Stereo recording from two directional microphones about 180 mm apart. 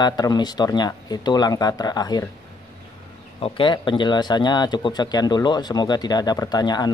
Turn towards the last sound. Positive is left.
turn(degrees=20)  # may be behind; listen again after turning